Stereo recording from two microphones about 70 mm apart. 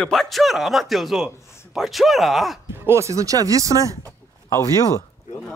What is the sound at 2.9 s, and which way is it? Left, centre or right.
Speech, right.